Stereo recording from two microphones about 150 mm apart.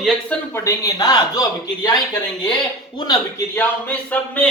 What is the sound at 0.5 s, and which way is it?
Speech, 20° left (ahead or behind).